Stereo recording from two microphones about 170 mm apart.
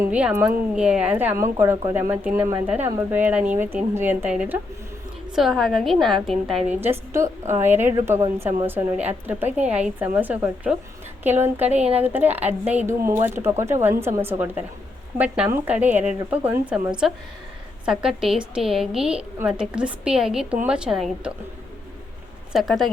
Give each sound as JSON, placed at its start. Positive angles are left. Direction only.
{"t": 0.0, "sound": "a woman's voice", "side_deg": -10}
{"t": 6.7, "sound": "a woman's voice", "side_deg": -15}
{"t": 22.5, "sound": "a woman's voice", "side_deg": 0}